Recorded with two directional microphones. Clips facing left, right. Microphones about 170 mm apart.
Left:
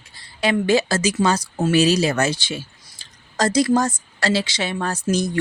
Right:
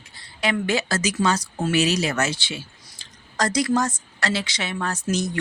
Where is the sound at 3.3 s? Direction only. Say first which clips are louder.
Left 4 dB; 30° left (ahead or behind).